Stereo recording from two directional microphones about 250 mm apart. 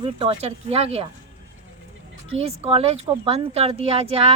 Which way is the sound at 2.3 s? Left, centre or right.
Right.